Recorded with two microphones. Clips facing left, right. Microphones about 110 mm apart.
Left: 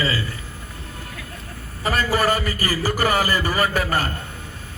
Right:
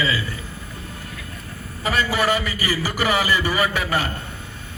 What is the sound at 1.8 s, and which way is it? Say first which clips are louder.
A man's voice: left 1 dB; 40° left (ahead or behind).